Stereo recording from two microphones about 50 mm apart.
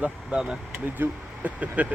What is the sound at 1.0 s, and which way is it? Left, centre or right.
Speech, right.